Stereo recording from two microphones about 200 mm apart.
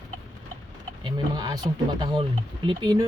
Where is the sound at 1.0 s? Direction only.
20° right (ahead or behind).